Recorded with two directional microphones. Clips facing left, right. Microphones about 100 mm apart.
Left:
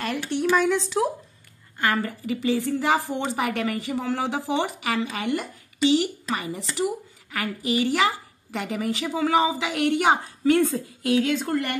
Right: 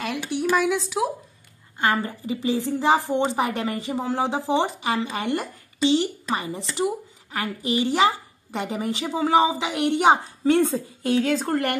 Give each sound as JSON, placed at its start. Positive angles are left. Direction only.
{"t": 0.0, "sound": "speech", "side_deg": -5}
{"t": 1.8, "sound": "speech", "side_deg": -20}
{"t": 5.0, "sound": "speech", "side_deg": -35}